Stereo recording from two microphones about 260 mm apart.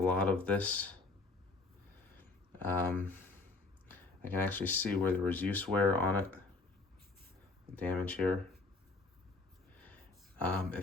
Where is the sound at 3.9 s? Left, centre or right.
Centre.